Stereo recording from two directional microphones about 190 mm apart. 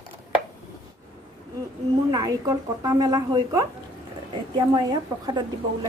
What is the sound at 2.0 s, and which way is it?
A woman's voice, 20° right (ahead or behind).